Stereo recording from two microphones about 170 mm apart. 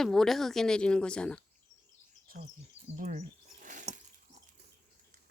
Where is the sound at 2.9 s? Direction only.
45° right (ahead or behind).